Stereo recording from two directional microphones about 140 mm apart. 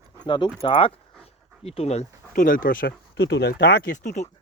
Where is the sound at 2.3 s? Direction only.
80° left.